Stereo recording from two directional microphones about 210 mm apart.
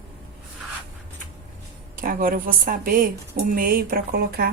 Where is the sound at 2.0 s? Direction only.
45° right (ahead or behind).